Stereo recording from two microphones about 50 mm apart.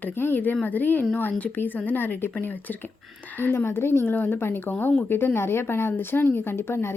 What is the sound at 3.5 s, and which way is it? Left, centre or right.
A woman's voice, left.